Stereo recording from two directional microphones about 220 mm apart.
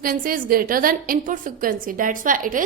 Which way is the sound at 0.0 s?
40° right (ahead or behind).